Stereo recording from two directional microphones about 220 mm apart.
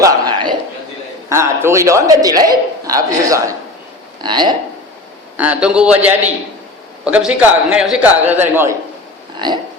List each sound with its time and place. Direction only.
0.0 s a sound: 20° right (ahead or behind)
1.3 s speech: 10° right (ahead or behind)
5.4 s a man's voice: 5° right (ahead or behind)
9.4 s speech: 20° right (ahead or behind)